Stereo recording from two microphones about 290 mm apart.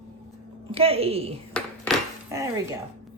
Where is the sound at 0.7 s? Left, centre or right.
Centre.